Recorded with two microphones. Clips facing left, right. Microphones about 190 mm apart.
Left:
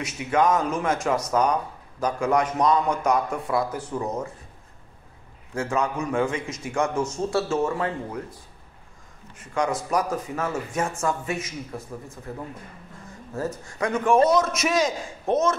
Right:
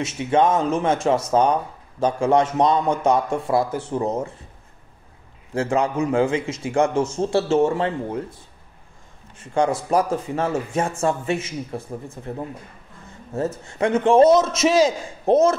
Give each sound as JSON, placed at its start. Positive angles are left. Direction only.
{"t": 0.0, "sound": "speech", "side_deg": -25}
{"t": 5.5, "sound": "speech", "side_deg": -30}
{"t": 9.4, "sound": "speech", "side_deg": -30}